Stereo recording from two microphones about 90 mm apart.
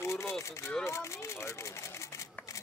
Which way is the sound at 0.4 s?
35° left (ahead or behind).